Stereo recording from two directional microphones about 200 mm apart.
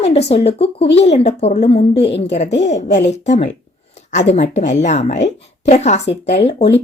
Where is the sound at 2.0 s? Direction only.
60° left (ahead or behind).